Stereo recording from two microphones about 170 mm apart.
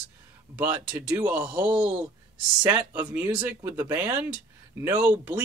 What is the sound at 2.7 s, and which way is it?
Speech, 10° right (ahead or behind).